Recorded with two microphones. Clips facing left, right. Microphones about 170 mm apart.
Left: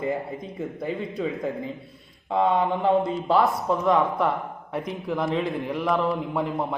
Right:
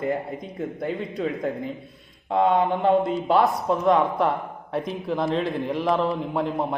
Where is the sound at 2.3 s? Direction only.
20° right (ahead or behind).